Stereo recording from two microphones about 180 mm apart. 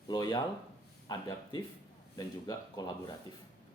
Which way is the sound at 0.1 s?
25° left (ahead or behind).